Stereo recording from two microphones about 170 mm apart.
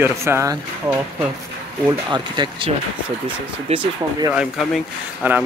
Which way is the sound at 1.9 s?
25° right (ahead or behind).